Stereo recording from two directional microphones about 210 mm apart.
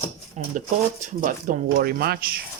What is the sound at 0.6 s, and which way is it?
Speech, 35° right (ahead or behind).